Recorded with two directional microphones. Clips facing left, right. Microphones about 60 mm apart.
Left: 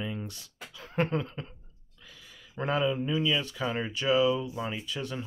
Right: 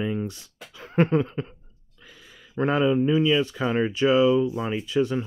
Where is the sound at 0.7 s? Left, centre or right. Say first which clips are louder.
Right 8 dB; right.